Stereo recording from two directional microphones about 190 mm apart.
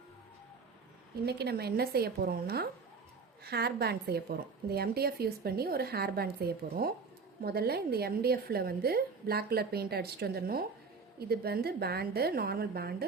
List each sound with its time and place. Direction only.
1.2 s a woman's voice: 60° right (ahead or behind)